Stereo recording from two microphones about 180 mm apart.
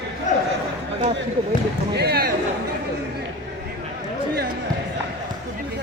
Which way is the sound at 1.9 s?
60° right (ahead or behind).